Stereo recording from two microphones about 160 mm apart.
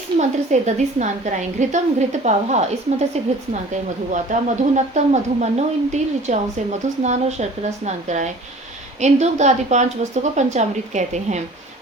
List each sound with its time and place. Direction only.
0.2 s speech: 45° right (ahead or behind)
4.1 s speech: 50° right (ahead or behind)